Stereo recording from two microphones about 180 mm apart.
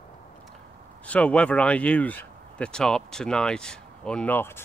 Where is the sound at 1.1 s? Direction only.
5° left (ahead or behind).